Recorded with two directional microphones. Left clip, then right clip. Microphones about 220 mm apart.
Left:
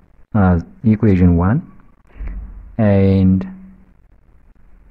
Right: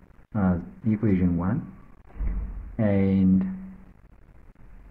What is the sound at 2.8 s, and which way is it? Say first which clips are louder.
Speech: left 10 dB; 50° left (ahead or behind).